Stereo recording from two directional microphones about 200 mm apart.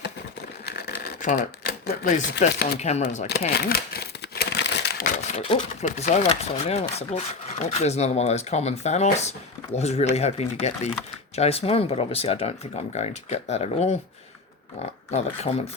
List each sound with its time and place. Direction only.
0.6 s typewriter: 50° left (ahead or behind)
2.7 s speech: 35° left (ahead or behind)
3.5 s crumpling: 50° left (ahead or behind)
5.3 s speech: 30° left (ahead or behind)